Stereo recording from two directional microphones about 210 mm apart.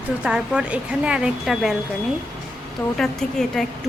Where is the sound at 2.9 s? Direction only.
Centre (ahead or behind).